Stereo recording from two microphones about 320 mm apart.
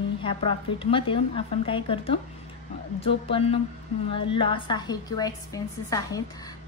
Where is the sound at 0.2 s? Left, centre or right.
Centre.